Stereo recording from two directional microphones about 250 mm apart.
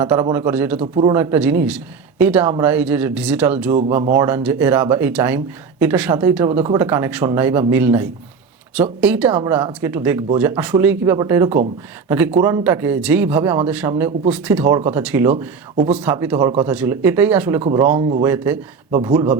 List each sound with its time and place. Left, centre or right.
0.0 s speech: centre
0.8 s speech: right
1.1 s speech: centre
6.7 s speech: centre
15.3 s speech: right
16.0 s speech: centre
17.6 s speech: right
18.2 s speech: centre